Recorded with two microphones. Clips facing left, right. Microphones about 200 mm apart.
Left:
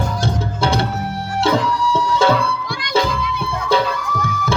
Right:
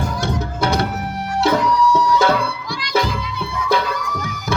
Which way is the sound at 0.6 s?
30° left (ahead or behind).